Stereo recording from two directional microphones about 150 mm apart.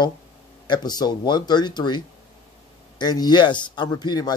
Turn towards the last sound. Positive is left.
turn(degrees=30)  # may be behind; listen again after turning